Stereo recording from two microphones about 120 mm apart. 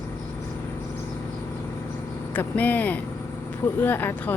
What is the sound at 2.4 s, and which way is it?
Speech, 15° left (ahead or behind).